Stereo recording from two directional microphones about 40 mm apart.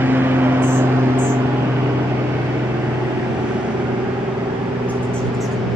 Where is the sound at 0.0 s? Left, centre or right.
Right.